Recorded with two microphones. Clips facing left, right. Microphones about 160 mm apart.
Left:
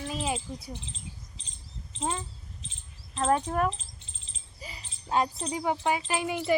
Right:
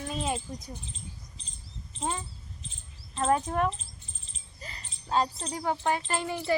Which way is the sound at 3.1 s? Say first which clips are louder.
Even; 5° right (ahead or behind).